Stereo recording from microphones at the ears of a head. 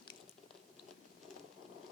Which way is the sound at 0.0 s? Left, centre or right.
Left.